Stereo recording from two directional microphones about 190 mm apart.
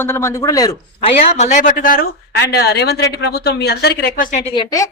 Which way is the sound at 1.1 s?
35° left (ahead or behind).